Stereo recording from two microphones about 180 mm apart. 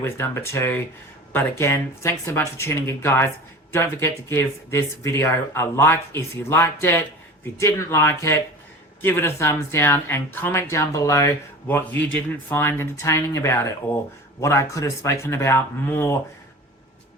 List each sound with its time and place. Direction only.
0.0 s speech: 15° left (ahead or behind)